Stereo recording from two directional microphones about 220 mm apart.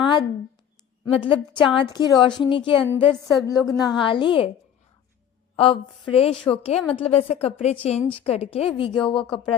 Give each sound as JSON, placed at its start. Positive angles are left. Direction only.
{"t": 0.0, "sound": "a sound", "side_deg": 20}
{"t": 1.1, "sound": "a woman's voice", "side_deg": 25}
{"t": 5.5, "sound": "a woman's voice", "side_deg": 25}